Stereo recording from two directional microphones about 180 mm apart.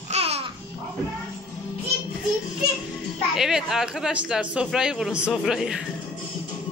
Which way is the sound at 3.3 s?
Centre (ahead or behind).